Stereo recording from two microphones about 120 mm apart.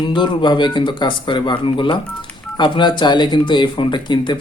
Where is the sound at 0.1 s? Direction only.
40° left (ahead or behind).